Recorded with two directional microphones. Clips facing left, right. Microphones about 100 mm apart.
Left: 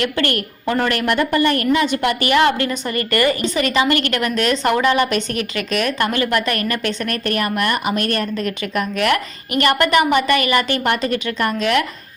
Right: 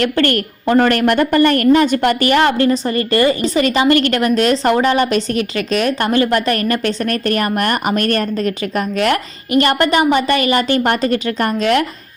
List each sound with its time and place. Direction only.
0.0 s a woman's voice: 40° right (ahead or behind)